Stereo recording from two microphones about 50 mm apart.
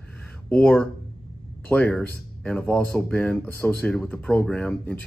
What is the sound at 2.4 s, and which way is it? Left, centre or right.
Speech, left.